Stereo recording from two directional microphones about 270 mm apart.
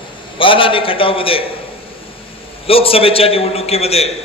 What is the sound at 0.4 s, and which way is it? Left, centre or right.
A man's voice, centre.